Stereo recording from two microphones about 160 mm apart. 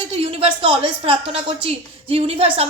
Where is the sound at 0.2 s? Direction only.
35° right (ahead or behind).